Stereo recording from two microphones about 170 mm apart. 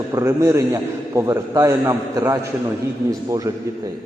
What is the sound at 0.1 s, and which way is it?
A man's voice, 15° right (ahead or behind).